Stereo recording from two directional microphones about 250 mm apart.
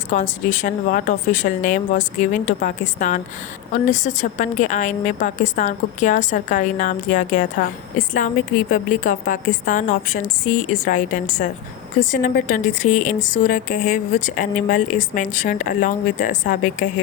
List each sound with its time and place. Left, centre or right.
0.1 s a woman's voice: left